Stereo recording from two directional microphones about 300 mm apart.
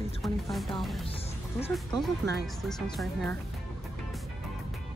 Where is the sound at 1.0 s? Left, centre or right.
Centre.